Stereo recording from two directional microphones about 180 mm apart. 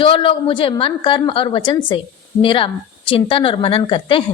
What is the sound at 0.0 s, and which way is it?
A woman's voice, 25° left (ahead or behind).